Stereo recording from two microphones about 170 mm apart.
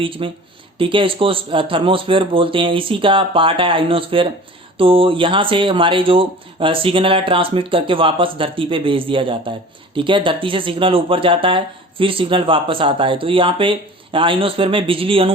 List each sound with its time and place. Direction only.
0.0 s speech: 30° right (ahead or behind)